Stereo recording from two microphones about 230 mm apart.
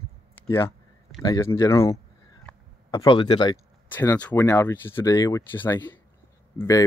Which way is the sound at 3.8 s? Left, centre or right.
Centre.